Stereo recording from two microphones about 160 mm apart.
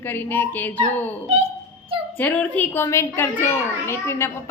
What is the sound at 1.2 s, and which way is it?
Speech, 40° right (ahead or behind).